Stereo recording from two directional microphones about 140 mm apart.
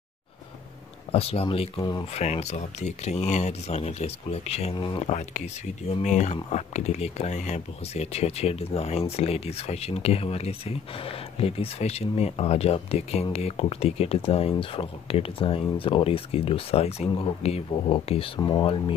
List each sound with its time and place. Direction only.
1.1 s speech: 45° left (ahead or behind)
4.7 s speech: 35° left (ahead or behind)
5.0 s speech: 55° left (ahead or behind)
18.4 s speech: 25° left (ahead or behind)